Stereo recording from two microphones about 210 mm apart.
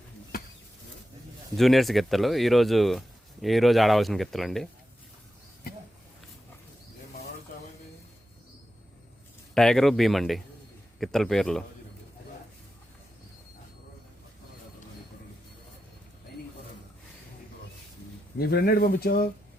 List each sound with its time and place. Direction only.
1.5 s speech: centre (ahead or behind)
9.6 s speech: centre (ahead or behind)
18.3 s speech: 45° left (ahead or behind)